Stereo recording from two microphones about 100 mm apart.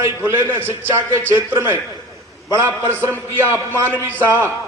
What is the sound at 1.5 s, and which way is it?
Speech, 25° right (ahead or behind).